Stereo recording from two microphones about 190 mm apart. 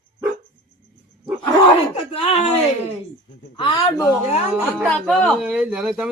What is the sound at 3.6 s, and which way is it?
Speech, 25° left (ahead or behind).